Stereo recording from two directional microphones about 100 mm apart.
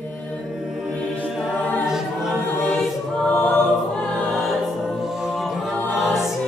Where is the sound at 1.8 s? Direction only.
5° right (ahead or behind).